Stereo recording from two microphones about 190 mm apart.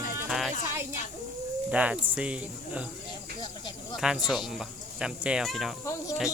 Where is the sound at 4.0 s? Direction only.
5° right (ahead or behind).